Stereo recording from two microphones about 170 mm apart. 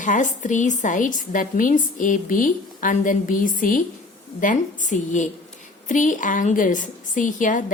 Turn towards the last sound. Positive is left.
turn(degrees=50)  # may be behind; listen again after turning